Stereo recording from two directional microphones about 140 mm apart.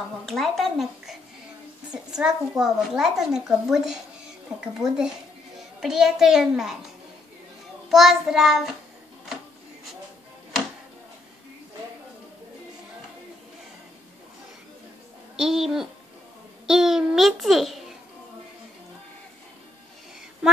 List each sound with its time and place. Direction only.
0.3 s a woman's voice: centre (ahead or behind)
7.9 s a woman's voice: centre (ahead or behind)
15.3 s speech: 5° right (ahead or behind)
16.6 s babbling: 5° right (ahead or behind)